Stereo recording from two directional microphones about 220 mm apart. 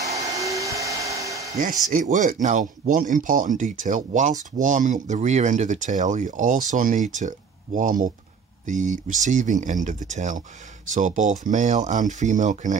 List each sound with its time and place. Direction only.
0.0 s hair dryer: 15° right (ahead or behind)
1.9 s speech: 35° right (ahead or behind)